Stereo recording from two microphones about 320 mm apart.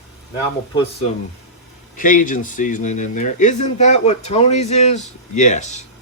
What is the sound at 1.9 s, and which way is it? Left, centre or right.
Speech, left.